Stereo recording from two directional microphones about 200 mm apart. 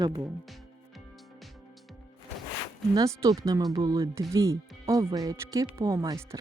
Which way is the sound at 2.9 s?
15° right (ahead or behind).